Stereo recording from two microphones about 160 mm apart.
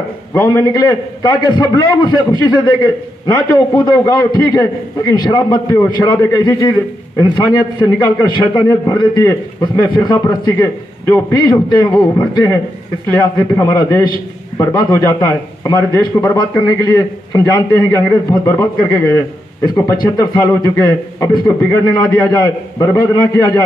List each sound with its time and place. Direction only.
0.6 s a man's voice: 25° left (ahead or behind)
10.6 s a man's voice: 15° left (ahead or behind)
11.8 s a man's voice: 25° left (ahead or behind)